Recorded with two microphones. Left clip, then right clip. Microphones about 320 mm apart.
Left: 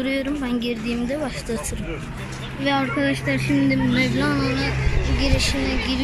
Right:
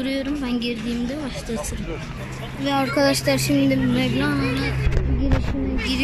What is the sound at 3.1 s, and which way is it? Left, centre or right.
Speech, centre.